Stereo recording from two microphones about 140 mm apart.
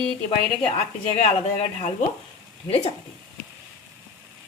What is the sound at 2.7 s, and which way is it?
Speech, 50° left (ahead or behind).